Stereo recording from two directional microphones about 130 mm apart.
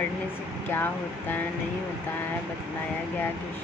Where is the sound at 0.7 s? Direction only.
15° left (ahead or behind).